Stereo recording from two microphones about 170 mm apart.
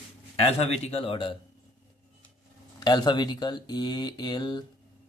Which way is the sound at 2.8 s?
25° left (ahead or behind).